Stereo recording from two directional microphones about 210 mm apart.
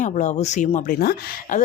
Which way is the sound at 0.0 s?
35° left (ahead or behind).